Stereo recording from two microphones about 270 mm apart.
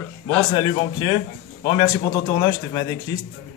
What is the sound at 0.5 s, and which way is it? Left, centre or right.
A man's voice, centre.